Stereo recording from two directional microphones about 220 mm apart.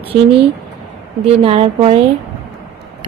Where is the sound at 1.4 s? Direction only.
25° right (ahead or behind).